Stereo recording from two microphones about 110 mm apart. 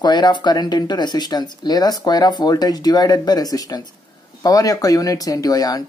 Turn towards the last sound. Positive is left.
turn(degrees=35)  # may be behind; listen again after turning